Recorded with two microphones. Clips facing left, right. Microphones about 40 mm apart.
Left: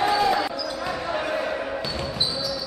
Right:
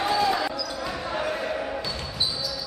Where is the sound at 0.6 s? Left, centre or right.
Centre.